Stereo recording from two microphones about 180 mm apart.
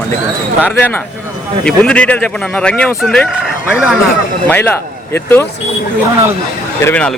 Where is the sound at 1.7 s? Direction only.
5° left (ahead or behind).